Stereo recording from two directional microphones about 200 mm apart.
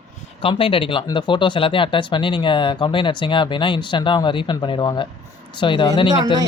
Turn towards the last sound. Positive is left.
turn(degrees=25)  # may be behind; listen again after turning